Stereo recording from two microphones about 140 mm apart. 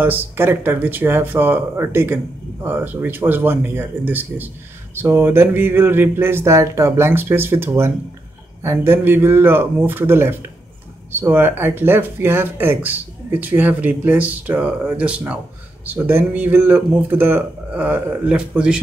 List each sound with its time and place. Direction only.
0.0 s speech: 15° right (ahead or behind)